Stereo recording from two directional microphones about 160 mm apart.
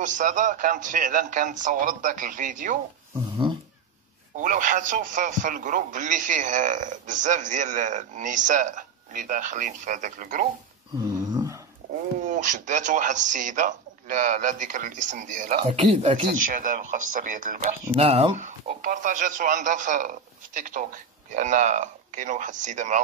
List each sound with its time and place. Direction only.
0.0 s speech: 50° right (ahead or behind)
4.4 s speech: 55° right (ahead or behind)
11.1 s a sound: 25° right (ahead or behind)
12.3 s speech: 50° right (ahead or behind); by 16.3 s 35° right (ahead or behind)
16.4 s speech: 55° right (ahead or behind)
17.9 s speech: 40° right (ahead or behind)
18.8 s speech: 55° right (ahead or behind)